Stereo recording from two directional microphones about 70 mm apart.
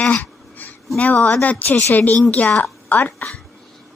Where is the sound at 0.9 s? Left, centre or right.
Left.